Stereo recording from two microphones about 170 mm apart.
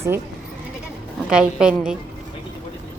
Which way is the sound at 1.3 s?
5° right (ahead or behind).